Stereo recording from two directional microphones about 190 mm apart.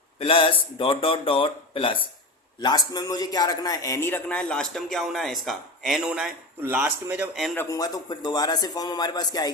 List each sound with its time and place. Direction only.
0.2 s a man's voice: 30° left (ahead or behind); by 7.5 s 5° right (ahead or behind)
7.5 s a man's voice: 15° left (ahead or behind)